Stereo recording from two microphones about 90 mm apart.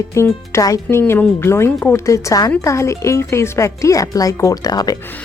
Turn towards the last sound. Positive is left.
turn(degrees=45)  # may be behind; listen again after turning